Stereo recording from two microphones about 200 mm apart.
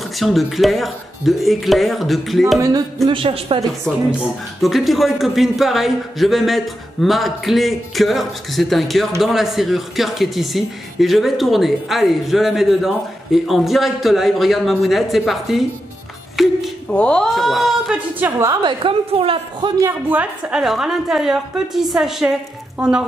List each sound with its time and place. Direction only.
0.2 s speech: centre (ahead or behind)
3.1 s speech: 25° right (ahead or behind)
3.9 s speech: 5° left (ahead or behind); by 19.7 s 25° right (ahead or behind)
19.8 s speech: 10° right (ahead or behind)